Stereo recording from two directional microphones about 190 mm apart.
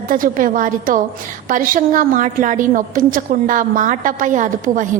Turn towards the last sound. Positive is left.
turn(degrees=-40)  # may be behind; listen again after turning